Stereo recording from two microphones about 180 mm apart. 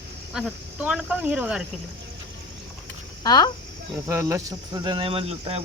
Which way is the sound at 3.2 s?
20° left (ahead or behind).